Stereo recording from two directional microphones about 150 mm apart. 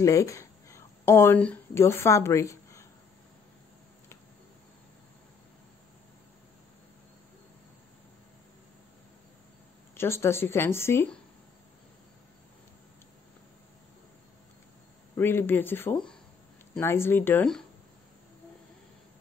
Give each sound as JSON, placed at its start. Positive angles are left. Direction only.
{"t": 0.0, "sound": "speech", "side_deg": 20}
{"t": 9.9, "sound": "speech", "side_deg": 15}
{"t": 15.1, "sound": "speech", "side_deg": 15}